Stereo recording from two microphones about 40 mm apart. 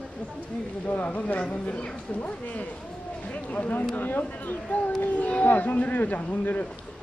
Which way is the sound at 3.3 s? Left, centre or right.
Left.